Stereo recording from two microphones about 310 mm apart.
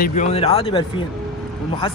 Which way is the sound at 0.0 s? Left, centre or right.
Left.